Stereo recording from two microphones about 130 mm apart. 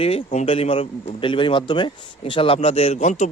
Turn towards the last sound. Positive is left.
turn(degrees=65)  # may be behind; listen again after turning